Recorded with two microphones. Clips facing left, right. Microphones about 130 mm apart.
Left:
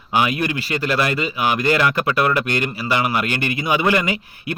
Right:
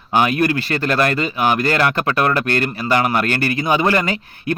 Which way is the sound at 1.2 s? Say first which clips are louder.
Right 3 dB; 35° right (ahead or behind).